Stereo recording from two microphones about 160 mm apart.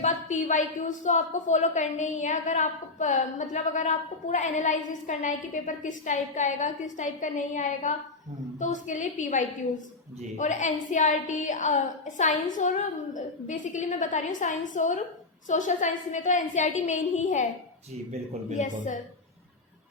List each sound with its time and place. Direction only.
0.0 s a woman's voice: 50° left (ahead or behind)
18.5 s a woman's voice: 50° left (ahead or behind)